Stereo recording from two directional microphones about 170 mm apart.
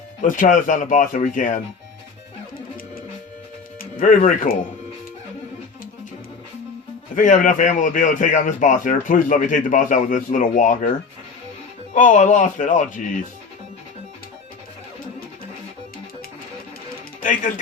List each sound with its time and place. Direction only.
0.3 s a man's voice: 50° left (ahead or behind)
3.8 s speech: 50° left (ahead or behind)
7.2 s a man's voice: 50° left (ahead or behind)
11.9 s a man's voice: 50° left (ahead or behind)
17.2 s speech: 50° left (ahead or behind)